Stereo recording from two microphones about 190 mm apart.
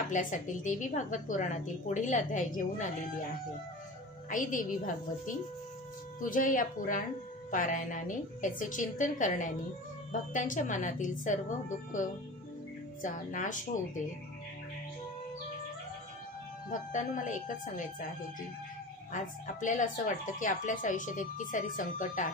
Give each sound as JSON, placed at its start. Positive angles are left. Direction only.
{"t": 0.1, "sound": "a woman's voice", "side_deg": 45}
{"t": 4.3, "sound": "speech", "side_deg": 45}
{"t": 16.7, "sound": "speech", "side_deg": 45}
{"t": 19.1, "sound": "speech", "side_deg": 40}